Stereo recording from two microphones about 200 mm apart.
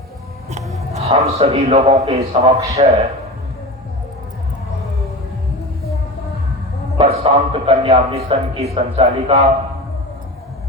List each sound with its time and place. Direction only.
0.9 s a man's voice: 30° right (ahead or behind)
7.0 s a man's voice: 30° right (ahead or behind)